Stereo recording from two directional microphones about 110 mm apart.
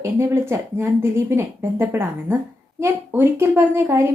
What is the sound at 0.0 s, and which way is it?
A woman's voice, 20° right (ahead or behind).